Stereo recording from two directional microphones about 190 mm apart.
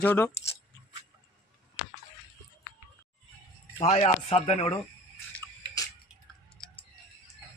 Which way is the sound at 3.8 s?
35° left (ahead or behind).